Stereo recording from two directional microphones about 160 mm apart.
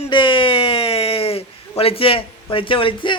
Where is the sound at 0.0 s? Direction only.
30° left (ahead or behind).